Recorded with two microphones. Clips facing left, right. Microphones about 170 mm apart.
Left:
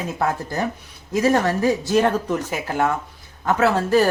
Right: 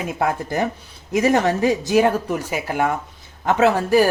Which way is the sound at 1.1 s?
20° right (ahead or behind).